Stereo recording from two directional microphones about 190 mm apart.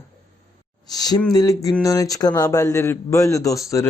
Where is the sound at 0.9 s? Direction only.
20° left (ahead or behind).